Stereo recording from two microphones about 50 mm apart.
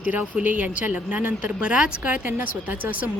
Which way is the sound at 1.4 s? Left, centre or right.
Right.